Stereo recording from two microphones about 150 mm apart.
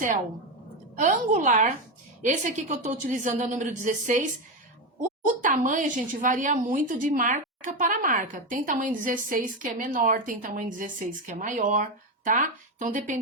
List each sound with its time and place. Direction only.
0.9 s a woman's voice: 55° right (ahead or behind)